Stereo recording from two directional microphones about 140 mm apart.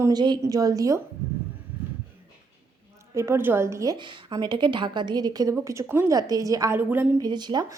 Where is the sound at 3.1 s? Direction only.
20° right (ahead or behind).